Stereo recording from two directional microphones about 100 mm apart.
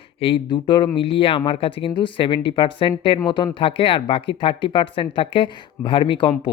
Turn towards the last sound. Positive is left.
turn(degrees=55)  # may be behind; listen again after turning